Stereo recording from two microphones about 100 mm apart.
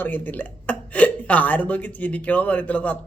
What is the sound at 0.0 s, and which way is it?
Speech, 20° left (ahead or behind).